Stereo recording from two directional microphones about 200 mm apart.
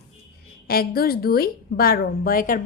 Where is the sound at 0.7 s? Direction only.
50° left (ahead or behind).